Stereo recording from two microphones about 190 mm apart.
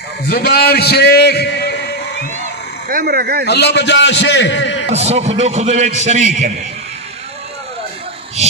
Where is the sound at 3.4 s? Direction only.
60° left (ahead or behind).